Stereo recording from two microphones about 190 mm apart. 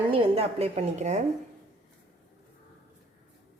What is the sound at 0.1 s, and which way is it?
A woman's voice, 30° right (ahead or behind).